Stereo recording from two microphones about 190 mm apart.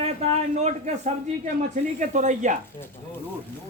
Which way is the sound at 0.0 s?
35° right (ahead or behind).